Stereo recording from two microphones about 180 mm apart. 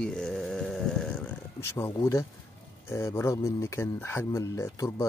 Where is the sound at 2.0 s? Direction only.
20° left (ahead or behind).